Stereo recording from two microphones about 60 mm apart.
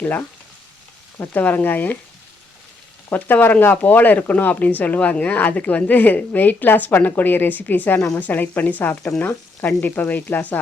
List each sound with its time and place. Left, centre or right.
0.0 s speech: left
3.1 s speech: left